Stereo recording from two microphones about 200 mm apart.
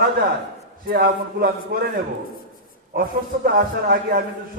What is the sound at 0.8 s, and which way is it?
Speech, 45° right (ahead or behind).